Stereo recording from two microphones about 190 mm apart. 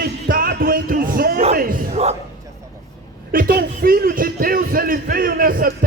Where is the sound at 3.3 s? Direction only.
50° right (ahead or behind).